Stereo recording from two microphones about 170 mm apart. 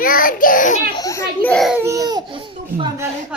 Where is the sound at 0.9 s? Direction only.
20° left (ahead or behind).